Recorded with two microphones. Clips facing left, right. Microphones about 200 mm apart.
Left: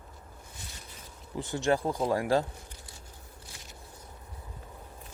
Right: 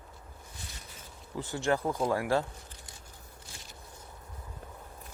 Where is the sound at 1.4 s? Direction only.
20° left (ahead or behind).